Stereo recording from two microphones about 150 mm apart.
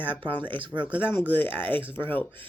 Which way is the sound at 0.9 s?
15° left (ahead or behind).